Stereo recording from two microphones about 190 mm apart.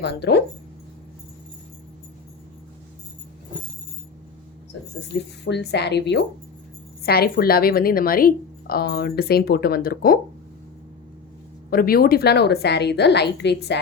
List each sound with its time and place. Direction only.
0.0 s a woman's voice: 60° left (ahead or behind)
5.0 s a woman's voice: 65° left (ahead or behind)
11.7 s a woman's voice: 50° left (ahead or behind)